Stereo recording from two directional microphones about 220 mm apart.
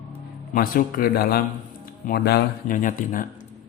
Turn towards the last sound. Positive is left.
turn(degrees=35)  # may be behind; listen again after turning